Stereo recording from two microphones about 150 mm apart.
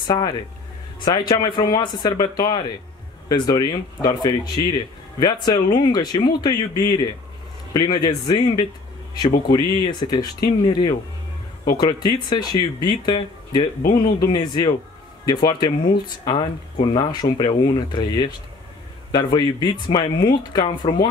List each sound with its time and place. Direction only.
0.0 s speech: 30° left (ahead or behind)